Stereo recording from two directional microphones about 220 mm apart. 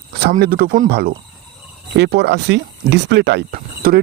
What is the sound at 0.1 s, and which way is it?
Speech, 45° right (ahead or behind).